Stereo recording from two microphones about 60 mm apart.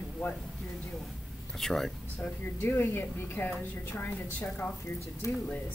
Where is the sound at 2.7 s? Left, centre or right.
Left.